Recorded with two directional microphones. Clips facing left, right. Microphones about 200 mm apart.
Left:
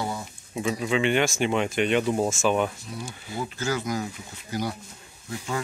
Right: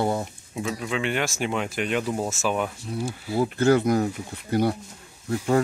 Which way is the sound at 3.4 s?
60° right (ahead or behind).